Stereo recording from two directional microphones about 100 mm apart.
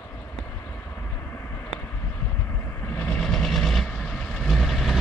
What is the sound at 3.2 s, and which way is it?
Vehicle, 5° left (ahead or behind).